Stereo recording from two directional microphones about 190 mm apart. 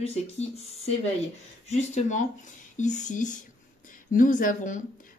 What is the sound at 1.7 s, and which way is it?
Speech, 40° left (ahead or behind).